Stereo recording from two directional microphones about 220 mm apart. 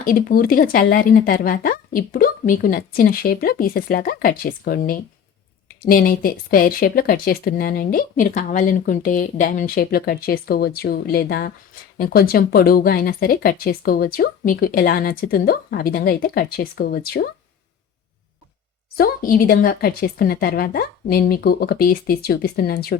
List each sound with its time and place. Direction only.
0.0 s speech: 40° left (ahead or behind)
18.9 s speech: 40° left (ahead or behind)